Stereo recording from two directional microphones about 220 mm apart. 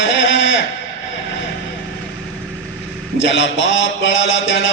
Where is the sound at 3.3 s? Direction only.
55° left (ahead or behind).